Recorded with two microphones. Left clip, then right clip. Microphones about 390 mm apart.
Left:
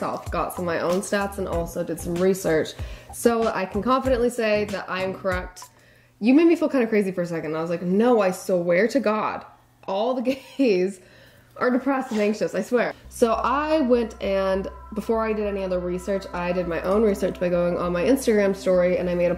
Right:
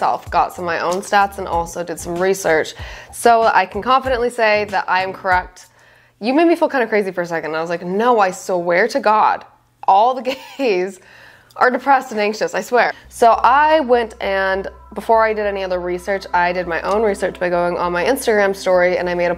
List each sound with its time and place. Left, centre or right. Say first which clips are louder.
0.0 s a woman's voice: right 10 dB; right